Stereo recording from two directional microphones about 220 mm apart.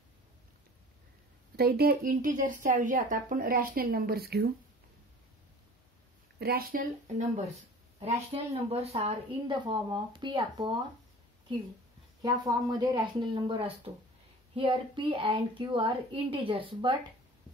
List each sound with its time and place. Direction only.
1.6 s speech: 45° right (ahead or behind)
6.4 s speech: 45° right (ahead or behind)
8.0 s speech: 25° right (ahead or behind)
12.2 s speech: 20° right (ahead or behind)